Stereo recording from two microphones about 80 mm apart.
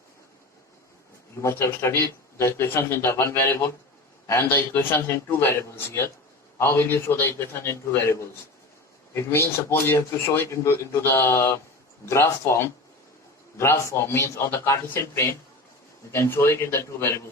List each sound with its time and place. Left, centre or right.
1.5 s speech: left
9.1 s speech: left